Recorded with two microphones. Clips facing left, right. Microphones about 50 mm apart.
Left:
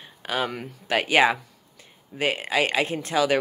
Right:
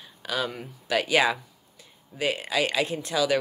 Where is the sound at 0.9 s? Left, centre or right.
Left.